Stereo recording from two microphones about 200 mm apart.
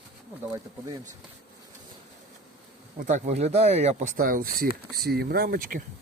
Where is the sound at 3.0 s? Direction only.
40° right (ahead or behind).